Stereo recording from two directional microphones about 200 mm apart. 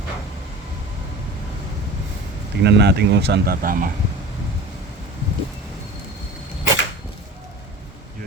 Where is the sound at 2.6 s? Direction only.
55° right (ahead or behind).